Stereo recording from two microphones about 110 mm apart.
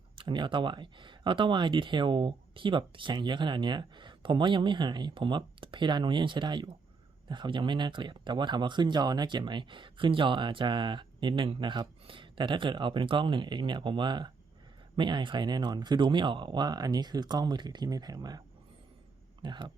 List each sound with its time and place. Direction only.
0.2 s speech: 45° right (ahead or behind)